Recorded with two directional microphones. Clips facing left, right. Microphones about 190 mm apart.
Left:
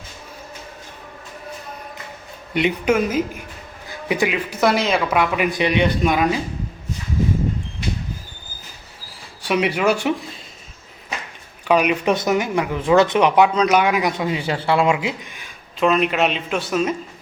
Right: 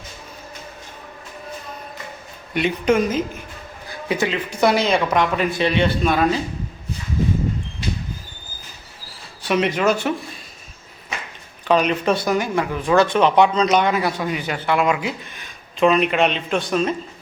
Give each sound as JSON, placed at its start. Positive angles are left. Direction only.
{"t": 2.5, "sound": "speech", "side_deg": 20}
{"t": 2.8, "sound": "a man's voice", "side_deg": 5}
{"t": 3.8, "sound": "a sound", "side_deg": 15}
{"t": 4.6, "sound": "a man's voice", "side_deg": 0}
{"t": 9.4, "sound": "a man's voice", "side_deg": 10}
{"t": 11.7, "sound": "speech", "side_deg": 10}
{"t": 15.4, "sound": "speech", "side_deg": 0}